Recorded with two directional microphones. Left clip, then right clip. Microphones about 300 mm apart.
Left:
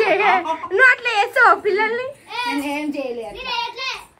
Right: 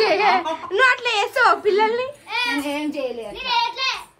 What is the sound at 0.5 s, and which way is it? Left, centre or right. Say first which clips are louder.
A woman's voice: left 3 dB; centre.